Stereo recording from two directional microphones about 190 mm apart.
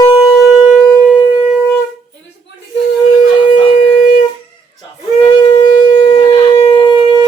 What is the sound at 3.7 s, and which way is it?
Shofar, 40° left (ahead or behind).